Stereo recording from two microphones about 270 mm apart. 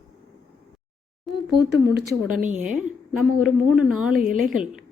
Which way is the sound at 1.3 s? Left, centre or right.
Centre.